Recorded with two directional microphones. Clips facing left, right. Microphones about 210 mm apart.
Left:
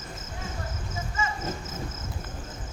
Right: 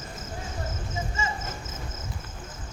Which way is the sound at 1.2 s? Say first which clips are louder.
Left 2 dB; 30° right (ahead or behind).